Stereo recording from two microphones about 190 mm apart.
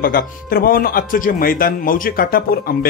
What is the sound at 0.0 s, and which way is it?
Speech, 50° left (ahead or behind).